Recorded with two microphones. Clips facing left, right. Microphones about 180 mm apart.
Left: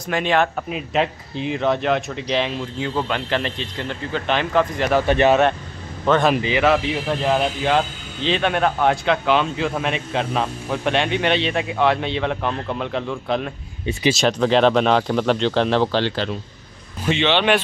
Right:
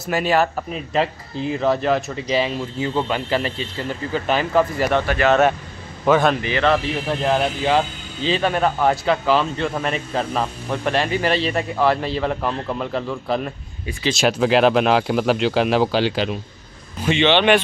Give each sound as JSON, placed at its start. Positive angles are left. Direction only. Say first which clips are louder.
{"t": 0.0, "sound": "speech", "louder": "right 1 dB", "side_deg": -5}
{"t": 5.0, "sound": "speech", "louder": "left 3 dB", "side_deg": 25}
{"t": 6.0, "sound": "speech", "louder": "right 1 dB", "side_deg": -5}
{"t": 6.3, "sound": "speech", "louder": "left 2 dB", "side_deg": 15}
{"t": 6.7, "sound": "speech", "louder": "left 1 dB", "side_deg": 5}
{"t": 17.0, "sound": "speech", "louder": "right 2 dB", "side_deg": 0}